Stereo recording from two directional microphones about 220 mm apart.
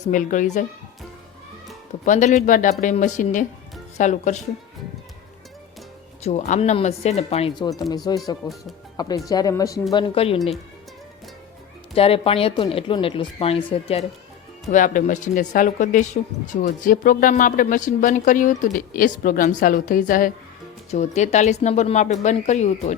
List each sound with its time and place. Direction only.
0.1 s speech: 35° left (ahead or behind)
2.0 s speech: 35° left (ahead or behind)
6.2 s speech: 30° left (ahead or behind)
11.9 s speech: 25° left (ahead or behind)
14.7 s speech: 35° left (ahead or behind)